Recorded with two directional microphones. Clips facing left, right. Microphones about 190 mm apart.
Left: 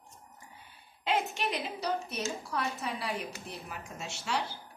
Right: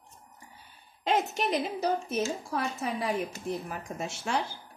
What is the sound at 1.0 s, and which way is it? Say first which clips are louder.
A woman's voice: right 4 dB; 45° right (ahead or behind).